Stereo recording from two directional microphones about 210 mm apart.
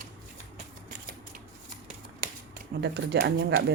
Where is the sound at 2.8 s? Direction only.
55° right (ahead or behind).